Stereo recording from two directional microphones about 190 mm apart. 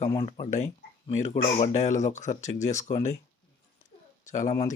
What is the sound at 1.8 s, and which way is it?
Speech, 40° left (ahead or behind).